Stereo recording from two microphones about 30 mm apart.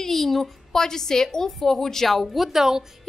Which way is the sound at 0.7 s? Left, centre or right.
Centre.